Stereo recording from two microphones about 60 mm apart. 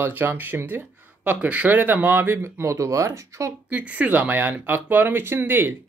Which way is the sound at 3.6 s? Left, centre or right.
Right.